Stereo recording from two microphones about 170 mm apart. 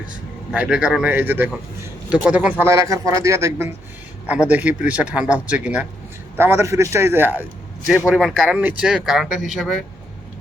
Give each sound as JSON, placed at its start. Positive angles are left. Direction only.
{"t": 0.5, "sound": "speech", "side_deg": -5}
{"t": 2.6, "sound": "speech", "side_deg": -20}